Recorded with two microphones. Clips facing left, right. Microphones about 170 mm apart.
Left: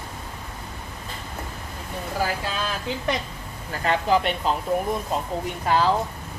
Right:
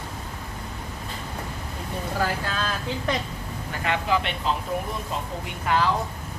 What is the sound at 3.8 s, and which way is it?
Speech, 40° left (ahead or behind).